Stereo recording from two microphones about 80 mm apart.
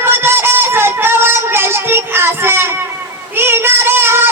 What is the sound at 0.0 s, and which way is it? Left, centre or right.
Music, right.